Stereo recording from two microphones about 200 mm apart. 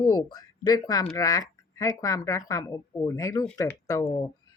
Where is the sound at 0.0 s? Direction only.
20° left (ahead or behind).